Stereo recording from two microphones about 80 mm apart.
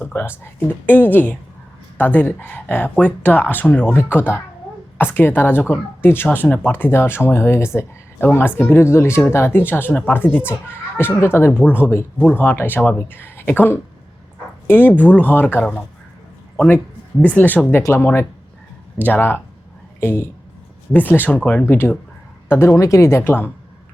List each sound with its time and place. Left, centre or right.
0.0 s speech: left
17.2 s speech: left
21.6 s speech: left